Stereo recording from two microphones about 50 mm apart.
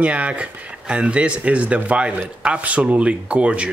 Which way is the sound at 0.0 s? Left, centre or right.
Right.